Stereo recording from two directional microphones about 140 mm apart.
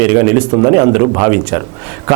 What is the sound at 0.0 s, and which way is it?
A man's voice, 20° right (ahead or behind).